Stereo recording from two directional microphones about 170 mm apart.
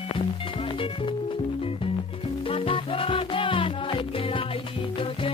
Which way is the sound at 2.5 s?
30° left (ahead or behind).